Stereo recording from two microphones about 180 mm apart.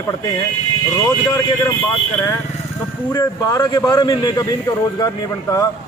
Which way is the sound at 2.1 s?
15° left (ahead or behind).